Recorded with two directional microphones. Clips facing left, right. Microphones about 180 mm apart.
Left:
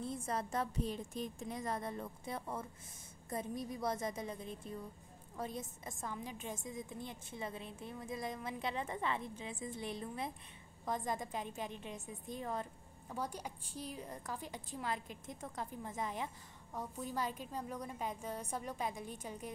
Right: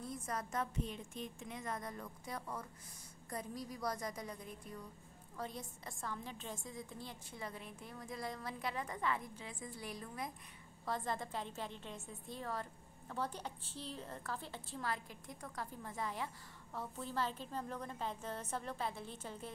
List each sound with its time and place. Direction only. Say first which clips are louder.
0.0 s a woman's voice: left 4 dB; 30° left (ahead or behind)